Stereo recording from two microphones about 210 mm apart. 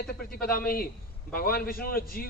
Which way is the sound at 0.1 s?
45° left (ahead or behind).